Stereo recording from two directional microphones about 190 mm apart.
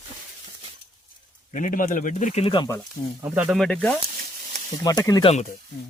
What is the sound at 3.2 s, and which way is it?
Speech, 5° right (ahead or behind).